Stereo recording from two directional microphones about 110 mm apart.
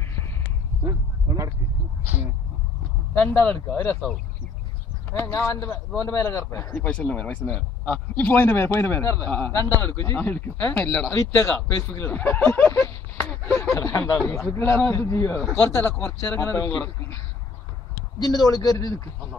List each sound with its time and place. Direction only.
0.8 s a sound: 30° right (ahead or behind)
3.2 s a man's voice: 15° left (ahead or behind)
5.1 s speech: 25° left (ahead or behind)
6.8 s a man's voice: 10° left (ahead or behind)
13.7 s speech: 30° left (ahead or behind)
18.2 s a man's voice: 35° left (ahead or behind)